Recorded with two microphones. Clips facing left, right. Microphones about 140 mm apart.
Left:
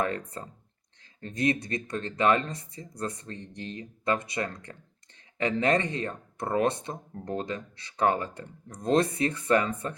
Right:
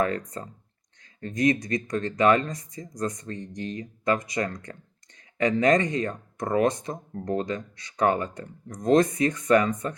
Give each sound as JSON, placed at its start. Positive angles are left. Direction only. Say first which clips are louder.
{"t": 0.0, "sound": "speech", "louder": "right 4 dB", "side_deg": 30}